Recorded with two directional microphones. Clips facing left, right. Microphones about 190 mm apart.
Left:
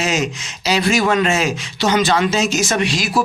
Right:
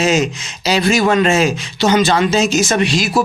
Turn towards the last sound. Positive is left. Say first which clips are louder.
# right 3 dB
turn(degrees=-25)  # may be behind; listen again after turning